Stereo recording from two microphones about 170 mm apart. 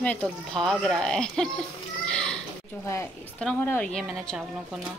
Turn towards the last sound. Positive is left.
turn(degrees=-5)  # may be behind; listen again after turning